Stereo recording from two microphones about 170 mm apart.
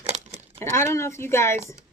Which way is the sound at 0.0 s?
40° right (ahead or behind).